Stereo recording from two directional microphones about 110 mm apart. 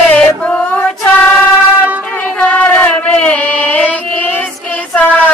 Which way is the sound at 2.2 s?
15° left (ahead or behind).